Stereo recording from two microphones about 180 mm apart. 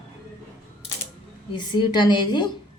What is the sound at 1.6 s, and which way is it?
Speech, 25° left (ahead or behind).